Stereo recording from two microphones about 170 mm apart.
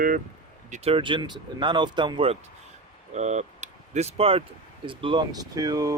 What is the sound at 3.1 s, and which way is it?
Speech, 45° right (ahead or behind).